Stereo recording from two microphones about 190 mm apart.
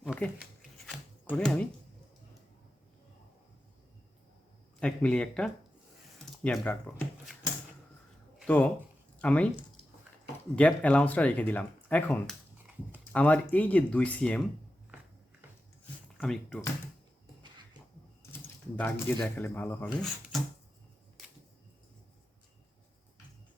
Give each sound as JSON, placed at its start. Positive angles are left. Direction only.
{"t": 0.0, "sound": "a sound", "side_deg": 0}
{"t": 4.8, "sound": "speech", "side_deg": 5}
{"t": 8.4, "sound": "speech", "side_deg": 10}
{"t": 10.5, "sound": "speech", "side_deg": 5}
{"t": 16.1, "sound": "speech", "side_deg": 0}
{"t": 18.8, "sound": "speech", "side_deg": 10}